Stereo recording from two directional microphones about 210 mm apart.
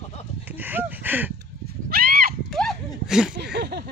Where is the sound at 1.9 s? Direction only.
45° right (ahead or behind).